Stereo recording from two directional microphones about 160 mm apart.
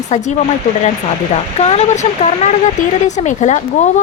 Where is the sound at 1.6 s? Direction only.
40° left (ahead or behind).